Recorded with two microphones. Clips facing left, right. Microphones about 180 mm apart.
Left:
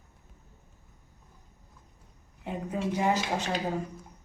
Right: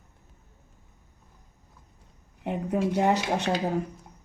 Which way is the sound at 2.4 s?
65° right (ahead or behind).